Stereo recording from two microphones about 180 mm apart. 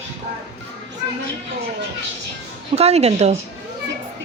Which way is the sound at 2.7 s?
35° right (ahead or behind).